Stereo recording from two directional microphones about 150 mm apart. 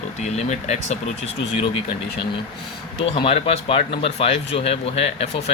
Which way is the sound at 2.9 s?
35° left (ahead or behind).